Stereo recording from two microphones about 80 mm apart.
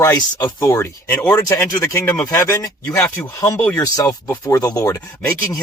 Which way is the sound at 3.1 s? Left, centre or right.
Left.